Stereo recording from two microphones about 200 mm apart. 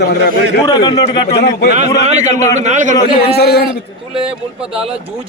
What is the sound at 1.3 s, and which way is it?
Speech, 55° left (ahead or behind).